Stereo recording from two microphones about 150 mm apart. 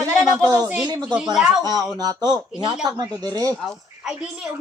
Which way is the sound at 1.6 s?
25° right (ahead or behind).